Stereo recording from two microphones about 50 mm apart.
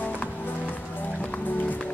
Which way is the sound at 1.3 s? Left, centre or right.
Left.